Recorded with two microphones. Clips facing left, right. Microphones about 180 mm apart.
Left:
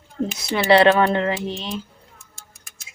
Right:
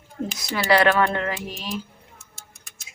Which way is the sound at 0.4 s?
25° left (ahead or behind).